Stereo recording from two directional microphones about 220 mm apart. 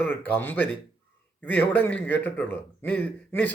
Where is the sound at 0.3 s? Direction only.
10° left (ahead or behind).